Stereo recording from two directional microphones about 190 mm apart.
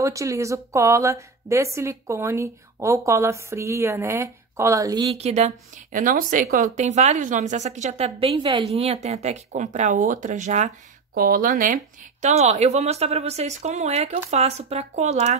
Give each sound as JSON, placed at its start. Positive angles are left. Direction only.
{"t": 0.0, "sound": "a woman's voice", "side_deg": -15}
{"t": 5.1, "sound": "speech", "side_deg": -35}